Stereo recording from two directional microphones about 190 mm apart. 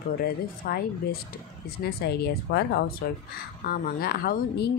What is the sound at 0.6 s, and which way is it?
Speech, 55° left (ahead or behind).